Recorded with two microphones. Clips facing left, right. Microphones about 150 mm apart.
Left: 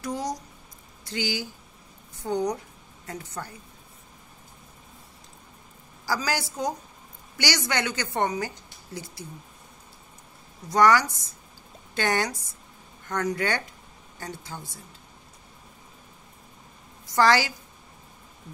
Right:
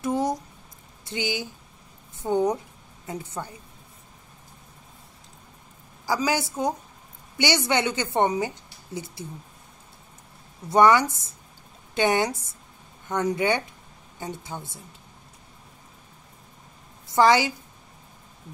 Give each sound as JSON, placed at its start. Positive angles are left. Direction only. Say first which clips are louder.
{"t": 0.0, "sound": "a woman's voice", "louder": "right 6 dB", "side_deg": -25}
{"t": 3.1, "sound": "a woman's voice", "louder": "right 3 dB", "side_deg": -15}
{"t": 6.0, "sound": "a woman's voice", "louder": "right 3 dB", "side_deg": -20}
{"t": 10.7, "sound": "a woman's voice", "louder": "right 2 dB", "side_deg": -20}
{"t": 17.1, "sound": "a woman's voice", "louder": "right 2 dB", "side_deg": -20}